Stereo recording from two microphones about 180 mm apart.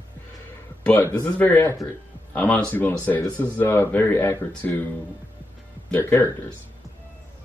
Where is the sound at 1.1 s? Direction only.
10° left (ahead or behind).